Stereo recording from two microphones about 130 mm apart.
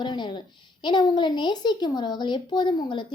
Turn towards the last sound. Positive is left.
turn(degrees=40)  # may be behind; listen again after turning